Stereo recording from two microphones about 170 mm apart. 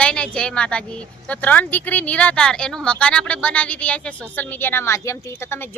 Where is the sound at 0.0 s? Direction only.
5° left (ahead or behind).